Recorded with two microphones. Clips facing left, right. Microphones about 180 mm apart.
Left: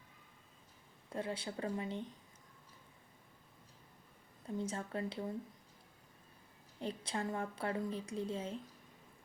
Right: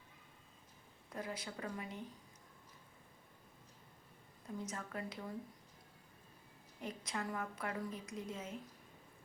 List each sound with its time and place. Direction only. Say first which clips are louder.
1.1 s a woman's voice: left 4 dB; 30° left (ahead or behind)
4.5 s a woman's voice: left 5 dB; 30° left (ahead or behind)
6.7 s a woman's voice: left 3 dB; 30° left (ahead or behind)